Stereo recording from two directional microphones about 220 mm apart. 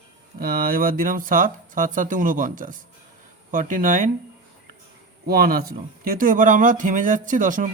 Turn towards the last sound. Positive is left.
turn(degrees=-35)  # may be behind; listen again after turning